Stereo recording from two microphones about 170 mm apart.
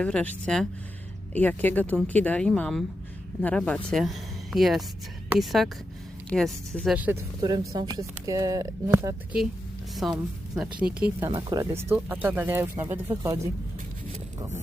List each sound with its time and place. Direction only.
0.0 s speech: 10° left (ahead or behind); by 9.4 s 15° right (ahead or behind)
9.9 s speech: centre (ahead or behind)
11.3 s speech: 20° right (ahead or behind)